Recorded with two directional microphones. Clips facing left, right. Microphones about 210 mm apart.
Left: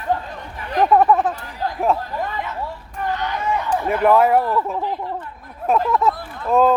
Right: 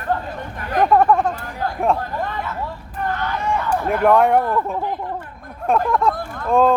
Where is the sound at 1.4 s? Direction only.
50° right (ahead or behind).